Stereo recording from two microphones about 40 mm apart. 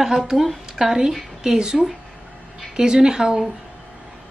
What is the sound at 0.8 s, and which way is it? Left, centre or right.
A woman's voice, centre.